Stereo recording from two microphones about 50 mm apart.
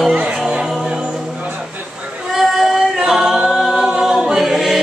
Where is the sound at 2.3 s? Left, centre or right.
Centre.